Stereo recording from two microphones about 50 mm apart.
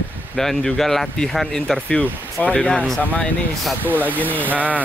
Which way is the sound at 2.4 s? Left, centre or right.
Left.